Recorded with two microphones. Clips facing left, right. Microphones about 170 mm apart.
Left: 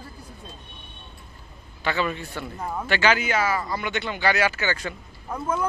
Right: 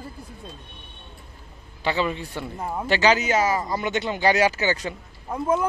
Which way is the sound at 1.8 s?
25° right (ahead or behind).